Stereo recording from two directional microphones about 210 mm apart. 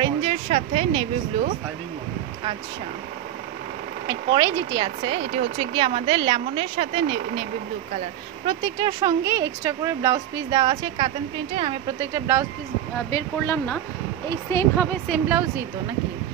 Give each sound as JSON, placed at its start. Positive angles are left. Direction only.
{"t": 0.0, "sound": "a sound", "side_deg": -30}
{"t": 4.1, "sound": "speech", "side_deg": -20}
{"t": 8.5, "sound": "speech", "side_deg": -20}
{"t": 13.1, "sound": "speech", "side_deg": 10}
{"t": 15.0, "sound": "speech", "side_deg": -5}